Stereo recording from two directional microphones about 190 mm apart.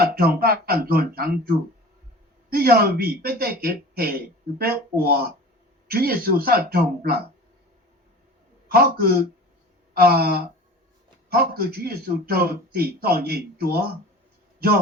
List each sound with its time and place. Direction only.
0.0 s speech: 55° right (ahead or behind)
8.7 s speech: 55° right (ahead or behind)